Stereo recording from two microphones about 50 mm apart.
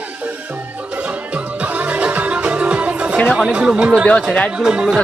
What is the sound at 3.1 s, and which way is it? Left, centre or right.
Speech, centre.